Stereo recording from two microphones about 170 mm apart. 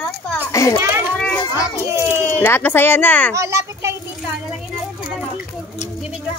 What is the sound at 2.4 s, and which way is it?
Speech, 10° left (ahead or behind).